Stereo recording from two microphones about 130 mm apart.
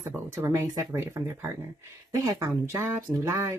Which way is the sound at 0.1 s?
20° right (ahead or behind).